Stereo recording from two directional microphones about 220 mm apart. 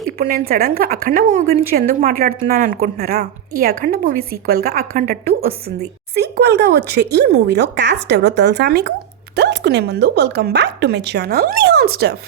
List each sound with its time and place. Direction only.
0.2 s a woman's voice: 40° right (ahead or behind)